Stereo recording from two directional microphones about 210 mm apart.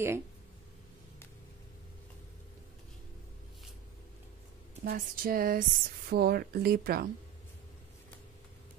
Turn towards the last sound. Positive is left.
turn(degrees=-45)  # may be behind; listen again after turning